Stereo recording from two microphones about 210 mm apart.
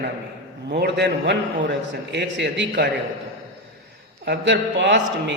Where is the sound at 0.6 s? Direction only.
55° right (ahead or behind).